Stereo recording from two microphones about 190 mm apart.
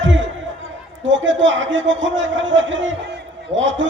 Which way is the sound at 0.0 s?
75° right (ahead or behind).